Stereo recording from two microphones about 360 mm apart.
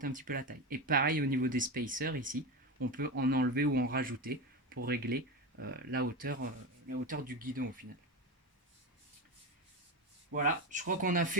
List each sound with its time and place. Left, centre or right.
0.0 s speech: right
10.3 s speech: right